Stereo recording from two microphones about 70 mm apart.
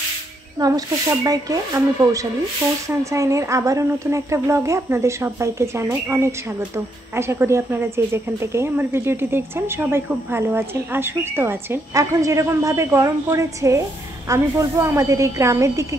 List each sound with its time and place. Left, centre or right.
0.6 s speech: right
3.0 s speech: right
11.9 s speech: right